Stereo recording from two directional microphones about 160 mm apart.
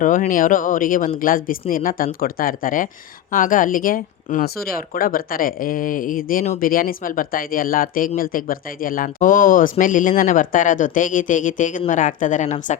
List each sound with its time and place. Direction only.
0.0 s a woman's voice: 55° left (ahead or behind)